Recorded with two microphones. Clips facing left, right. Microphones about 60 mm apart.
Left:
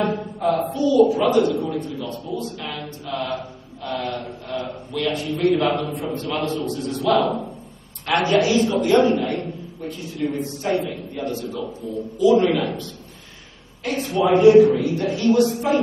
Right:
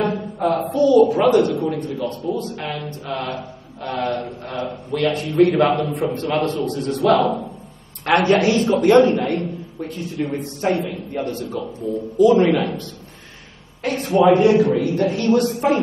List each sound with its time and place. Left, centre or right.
0.4 s a man's voice: right
2.6 s mantra: right
5.4 s a woman's voice: right
13.8 s a man's voice: right